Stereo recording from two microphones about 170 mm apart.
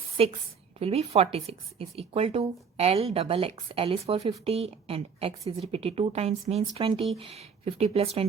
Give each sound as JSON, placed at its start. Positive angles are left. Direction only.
{"t": 0.2, "sound": "speech", "side_deg": -35}